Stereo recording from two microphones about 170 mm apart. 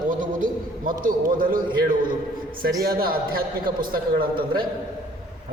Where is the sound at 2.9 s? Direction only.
60° right (ahead or behind).